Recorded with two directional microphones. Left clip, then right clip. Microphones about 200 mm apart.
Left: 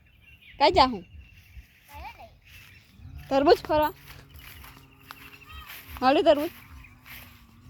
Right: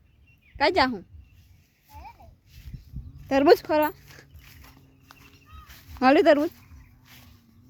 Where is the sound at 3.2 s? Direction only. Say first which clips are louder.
Right 2 dB; 30° right (ahead or behind).